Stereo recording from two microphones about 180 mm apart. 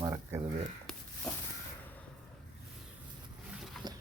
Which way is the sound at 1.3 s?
5° left (ahead or behind).